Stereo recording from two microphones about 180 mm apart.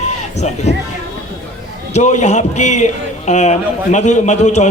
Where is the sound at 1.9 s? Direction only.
40° left (ahead or behind).